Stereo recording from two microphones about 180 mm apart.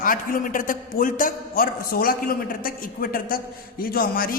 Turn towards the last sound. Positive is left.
turn(degrees=60)  # may be behind; listen again after turning